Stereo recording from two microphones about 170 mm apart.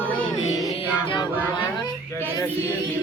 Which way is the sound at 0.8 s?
30° left (ahead or behind).